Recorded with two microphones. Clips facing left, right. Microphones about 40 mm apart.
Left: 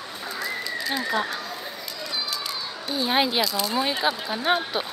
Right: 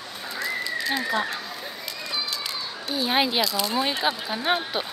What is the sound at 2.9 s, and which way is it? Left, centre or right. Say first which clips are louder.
Speech: even; centre.